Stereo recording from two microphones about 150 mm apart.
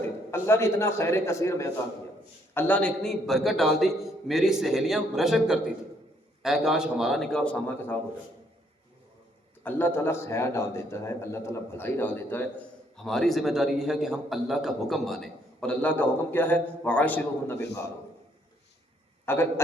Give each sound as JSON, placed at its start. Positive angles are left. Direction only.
{"t": 0.3, "sound": "a man's voice", "side_deg": 15}
{"t": 9.6, "sound": "a man's voice", "side_deg": 15}
{"t": 13.0, "sound": "a man's voice", "side_deg": 0}
{"t": 19.2, "sound": "a man's voice", "side_deg": 15}